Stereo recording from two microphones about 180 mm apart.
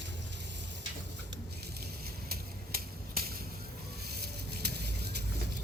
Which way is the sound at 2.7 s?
55° right (ahead or behind).